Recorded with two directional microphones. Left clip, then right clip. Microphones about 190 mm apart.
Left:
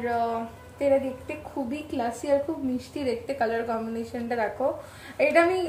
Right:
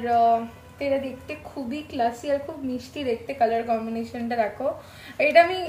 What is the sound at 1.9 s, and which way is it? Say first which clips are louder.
Speech: right 2 dB; 20° left (ahead or behind).